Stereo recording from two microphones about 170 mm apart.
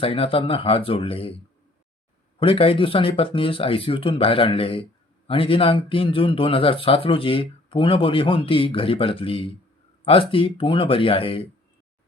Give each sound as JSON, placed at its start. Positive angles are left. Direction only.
{"t": 0.0, "sound": "speech", "side_deg": 30}
{"t": 2.4, "sound": "speech", "side_deg": 30}